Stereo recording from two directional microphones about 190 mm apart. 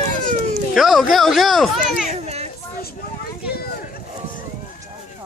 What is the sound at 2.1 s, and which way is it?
Children playing, 35° right (ahead or behind).